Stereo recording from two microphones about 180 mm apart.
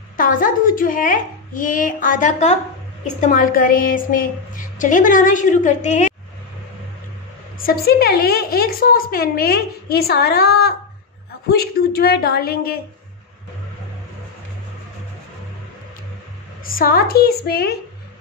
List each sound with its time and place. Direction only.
0.2 s a woman's voice: 50° left (ahead or behind)
7.5 s a woman's voice: 55° left (ahead or behind)
16.6 s a woman's voice: 55° left (ahead or behind)